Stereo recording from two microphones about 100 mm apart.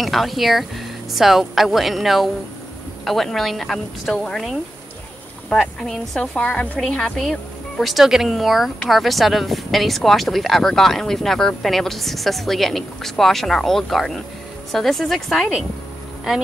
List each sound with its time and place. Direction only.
0.0 s a woman's voice: centre (ahead or behind)
6.8 s a woman's voice: 5° left (ahead or behind)